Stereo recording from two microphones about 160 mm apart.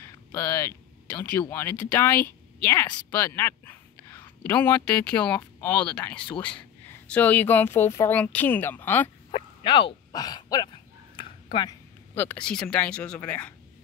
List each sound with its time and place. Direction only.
0.0 s a sound: 15° left (ahead or behind)
1.5 s speech: 15° left (ahead or behind)
3.0 s whispering: 10° left (ahead or behind)
4.5 s speech: 10° left (ahead or behind)
9.3 s a sound: 30° left (ahead or behind)
12.2 s speech: 10° left (ahead or behind)